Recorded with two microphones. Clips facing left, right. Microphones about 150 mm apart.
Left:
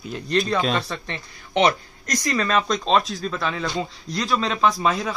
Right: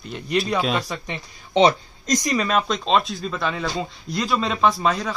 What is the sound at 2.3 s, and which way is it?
Speech, 5° right (ahead or behind).